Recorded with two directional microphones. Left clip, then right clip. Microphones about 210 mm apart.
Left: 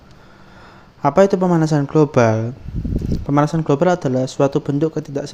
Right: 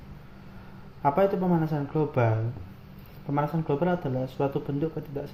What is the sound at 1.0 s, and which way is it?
Speech, 50° left (ahead or behind).